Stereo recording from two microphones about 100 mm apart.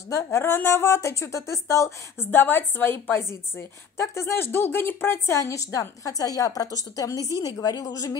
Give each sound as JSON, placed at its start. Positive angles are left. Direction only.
{"t": 0.1, "sound": "a woman's voice", "side_deg": 25}
{"t": 2.3, "sound": "a woman's voice", "side_deg": 20}